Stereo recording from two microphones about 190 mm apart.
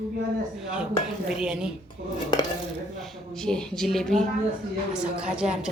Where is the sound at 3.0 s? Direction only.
Centre (ahead or behind).